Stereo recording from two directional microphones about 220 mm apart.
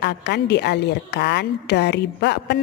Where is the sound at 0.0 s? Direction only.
50° left (ahead or behind).